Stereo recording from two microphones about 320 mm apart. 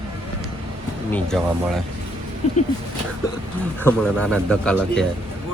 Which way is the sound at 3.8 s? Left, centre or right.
Centre.